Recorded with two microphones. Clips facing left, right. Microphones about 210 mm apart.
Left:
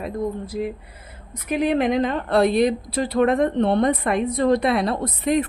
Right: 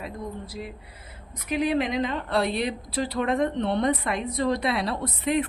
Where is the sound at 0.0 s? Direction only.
50° left (ahead or behind).